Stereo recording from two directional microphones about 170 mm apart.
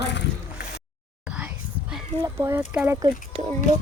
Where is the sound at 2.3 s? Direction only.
15° right (ahead or behind).